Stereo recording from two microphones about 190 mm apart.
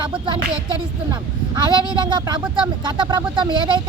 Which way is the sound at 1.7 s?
25° right (ahead or behind).